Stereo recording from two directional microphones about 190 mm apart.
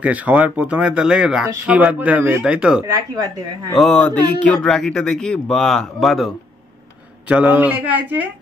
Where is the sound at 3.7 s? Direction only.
Centre (ahead or behind).